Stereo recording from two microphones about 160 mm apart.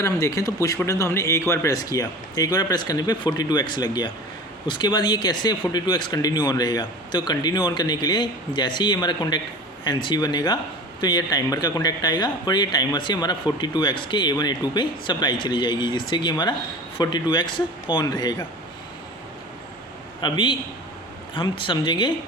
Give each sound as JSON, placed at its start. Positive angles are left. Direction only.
{"t": 0.0, "sound": "speech", "side_deg": 20}
{"t": 20.2, "sound": "speech", "side_deg": 30}